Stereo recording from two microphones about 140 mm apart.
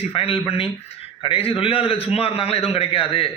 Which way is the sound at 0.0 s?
40° left (ahead or behind).